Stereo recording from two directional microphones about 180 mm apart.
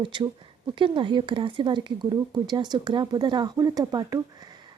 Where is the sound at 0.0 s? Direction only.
25° right (ahead or behind).